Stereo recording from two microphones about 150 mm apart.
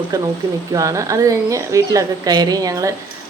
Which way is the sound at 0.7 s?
20° right (ahead or behind).